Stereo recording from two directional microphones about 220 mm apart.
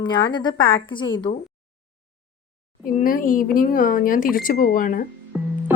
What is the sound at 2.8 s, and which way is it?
Speech, 40° left (ahead or behind).